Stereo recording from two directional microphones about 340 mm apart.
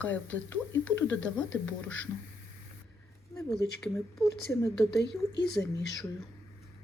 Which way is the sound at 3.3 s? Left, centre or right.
Centre.